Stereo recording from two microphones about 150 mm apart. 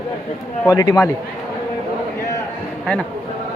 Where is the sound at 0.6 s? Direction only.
20° left (ahead or behind).